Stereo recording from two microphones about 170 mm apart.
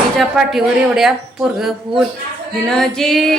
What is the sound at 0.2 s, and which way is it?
A woman's voice, centre (ahead or behind).